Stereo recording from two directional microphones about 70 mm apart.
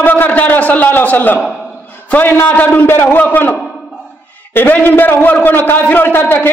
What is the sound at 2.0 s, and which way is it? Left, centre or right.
A man's voice, left.